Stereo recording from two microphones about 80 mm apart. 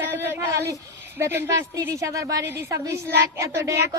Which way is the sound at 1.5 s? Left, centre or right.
Right.